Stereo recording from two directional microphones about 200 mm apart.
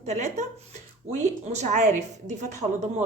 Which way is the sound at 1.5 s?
35° right (ahead or behind).